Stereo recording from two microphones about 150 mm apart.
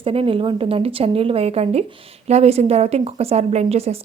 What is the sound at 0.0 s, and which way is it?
A woman's voice, 40° right (ahead or behind).